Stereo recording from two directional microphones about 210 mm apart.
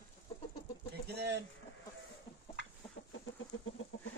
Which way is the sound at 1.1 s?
55° right (ahead or behind).